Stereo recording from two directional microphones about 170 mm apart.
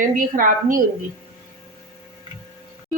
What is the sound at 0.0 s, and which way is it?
Speech, 50° right (ahead or behind).